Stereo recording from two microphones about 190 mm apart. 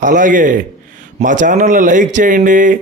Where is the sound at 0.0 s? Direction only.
45° right (ahead or behind).